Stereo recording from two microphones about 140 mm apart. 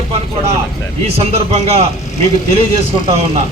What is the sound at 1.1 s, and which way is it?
Speech, 50° right (ahead or behind).